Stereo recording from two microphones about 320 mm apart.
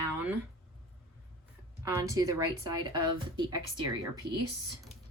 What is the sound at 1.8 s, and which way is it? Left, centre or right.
Speech, centre.